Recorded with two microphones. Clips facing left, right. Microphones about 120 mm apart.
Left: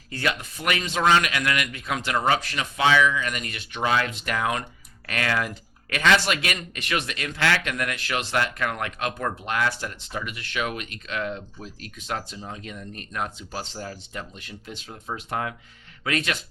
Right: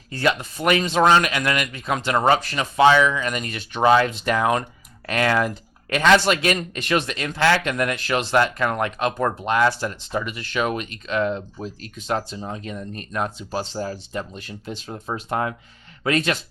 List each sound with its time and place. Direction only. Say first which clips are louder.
0.1 s speech: right 6 dB; 35° right (ahead or behind)